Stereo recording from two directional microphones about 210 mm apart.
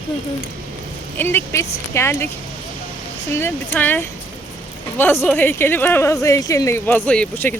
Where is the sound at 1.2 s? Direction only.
10° left (ahead or behind).